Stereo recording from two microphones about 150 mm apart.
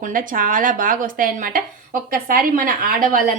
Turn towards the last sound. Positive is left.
turn(degrees=-65)  # may be behind; listen again after turning